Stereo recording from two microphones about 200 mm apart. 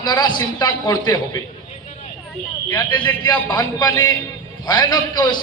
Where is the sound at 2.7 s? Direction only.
20° left (ahead or behind).